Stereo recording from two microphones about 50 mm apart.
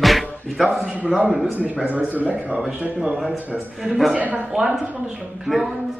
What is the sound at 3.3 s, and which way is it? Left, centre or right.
Speech, right.